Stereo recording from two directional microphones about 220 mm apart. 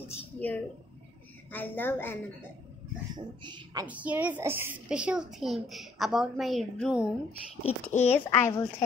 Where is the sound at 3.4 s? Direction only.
20° right (ahead or behind).